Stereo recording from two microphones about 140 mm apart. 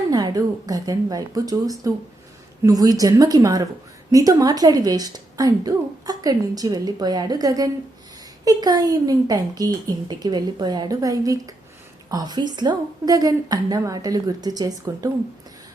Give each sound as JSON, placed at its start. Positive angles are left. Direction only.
{"t": 0.1, "sound": "a woman's voice", "side_deg": -30}